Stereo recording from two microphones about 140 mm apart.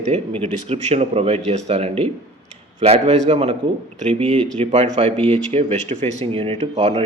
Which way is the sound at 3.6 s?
40° right (ahead or behind).